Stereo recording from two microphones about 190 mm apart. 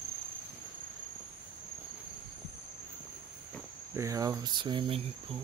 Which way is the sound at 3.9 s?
15° right (ahead or behind).